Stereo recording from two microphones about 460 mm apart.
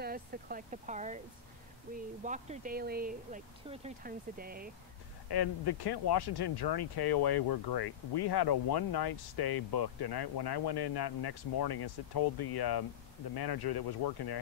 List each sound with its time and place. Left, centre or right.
0.0 s speech: centre
2.2 s speech: centre
5.3 s speech: left